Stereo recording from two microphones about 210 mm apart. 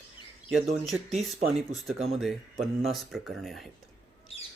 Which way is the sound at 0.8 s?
Centre (ahead or behind).